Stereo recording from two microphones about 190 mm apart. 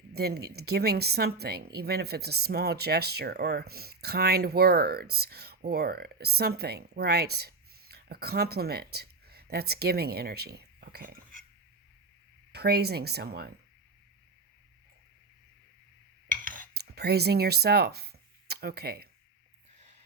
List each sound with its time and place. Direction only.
0.1 s speech: 55° right (ahead or behind)
12.5 s speech: 60° right (ahead or behind)
16.3 s cutlery: 45° right (ahead or behind)
19.7 s whispering: 40° right (ahead or behind)